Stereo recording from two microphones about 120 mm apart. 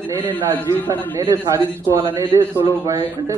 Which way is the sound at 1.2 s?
25° right (ahead or behind).